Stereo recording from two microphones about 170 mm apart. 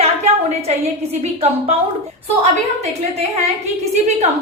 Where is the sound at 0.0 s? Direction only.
40° right (ahead or behind).